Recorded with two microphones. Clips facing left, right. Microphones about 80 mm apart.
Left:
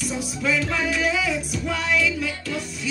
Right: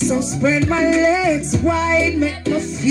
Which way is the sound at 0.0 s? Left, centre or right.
Right.